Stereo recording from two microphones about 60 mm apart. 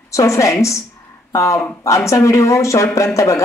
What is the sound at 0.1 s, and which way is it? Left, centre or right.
Speech, left.